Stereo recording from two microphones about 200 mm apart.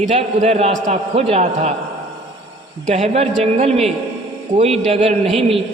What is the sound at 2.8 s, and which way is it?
A man's voice, 35° right (ahead or behind).